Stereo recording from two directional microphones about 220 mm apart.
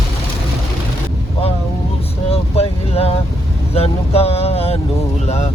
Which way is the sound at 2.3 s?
25° left (ahead or behind).